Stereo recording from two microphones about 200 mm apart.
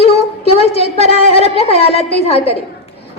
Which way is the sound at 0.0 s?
30° left (ahead or behind).